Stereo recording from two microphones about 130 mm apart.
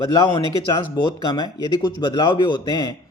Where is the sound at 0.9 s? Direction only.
30° left (ahead or behind).